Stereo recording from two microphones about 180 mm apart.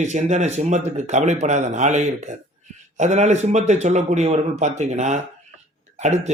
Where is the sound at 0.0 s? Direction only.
40° right (ahead or behind).